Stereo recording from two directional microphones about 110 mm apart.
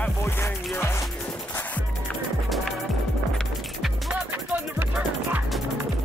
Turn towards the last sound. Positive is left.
turn(degrees=-15)  # may be behind; listen again after turning